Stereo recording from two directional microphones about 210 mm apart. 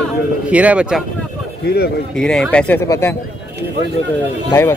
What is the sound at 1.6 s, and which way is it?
Speech, 45° left (ahead or behind).